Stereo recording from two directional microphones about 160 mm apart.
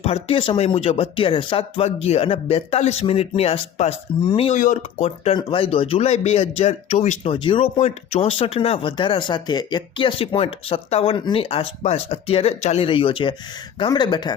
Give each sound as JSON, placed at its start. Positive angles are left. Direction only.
{"t": 0.0, "sound": "speech", "side_deg": 40}
{"t": 4.5, "sound": "speech", "side_deg": 55}
{"t": 5.0, "sound": "speech", "side_deg": 35}
{"t": 7.3, "sound": "speech", "side_deg": 35}